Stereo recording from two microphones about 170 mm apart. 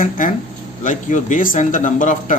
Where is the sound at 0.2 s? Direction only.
50° left (ahead or behind).